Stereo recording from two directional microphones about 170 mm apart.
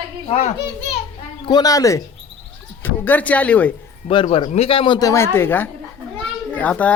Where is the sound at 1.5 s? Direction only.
20° left (ahead or behind).